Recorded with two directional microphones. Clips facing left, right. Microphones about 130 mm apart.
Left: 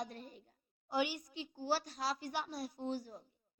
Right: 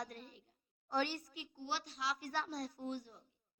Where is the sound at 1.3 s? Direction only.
30° left (ahead or behind).